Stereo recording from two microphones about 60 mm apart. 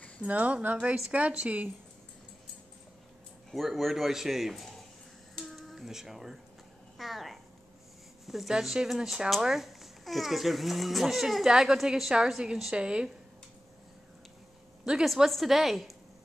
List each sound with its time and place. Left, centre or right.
0.3 s speech: right
3.5 s speech: centre
5.4 s a sound: centre
8.3 s speech: centre
15.0 s speech: centre